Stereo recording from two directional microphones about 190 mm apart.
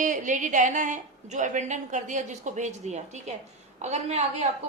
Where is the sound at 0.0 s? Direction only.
40° right (ahead or behind).